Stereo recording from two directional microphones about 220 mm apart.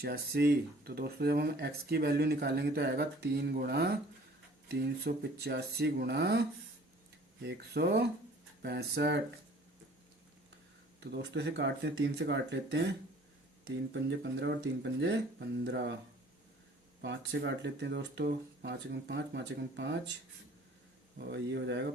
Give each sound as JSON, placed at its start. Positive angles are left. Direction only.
{"t": 0.0, "sound": "speech", "side_deg": -45}
{"t": 11.0, "sound": "speech", "side_deg": -50}
{"t": 17.0, "sound": "speech", "side_deg": -50}
{"t": 21.2, "sound": "speech", "side_deg": -50}